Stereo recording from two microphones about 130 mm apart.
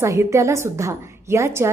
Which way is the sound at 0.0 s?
20° right (ahead or behind).